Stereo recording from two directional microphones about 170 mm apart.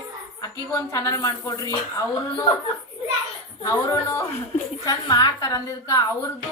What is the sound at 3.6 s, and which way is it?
A woman's voice, 20° left (ahead or behind).